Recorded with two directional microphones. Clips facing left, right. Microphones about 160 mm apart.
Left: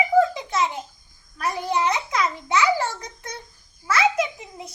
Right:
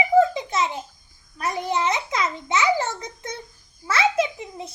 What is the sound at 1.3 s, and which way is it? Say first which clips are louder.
A child's voice: even; 25° right (ahead or behind).